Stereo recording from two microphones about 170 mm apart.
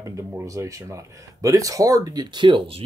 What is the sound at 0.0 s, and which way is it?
Speech, 15° right (ahead or behind).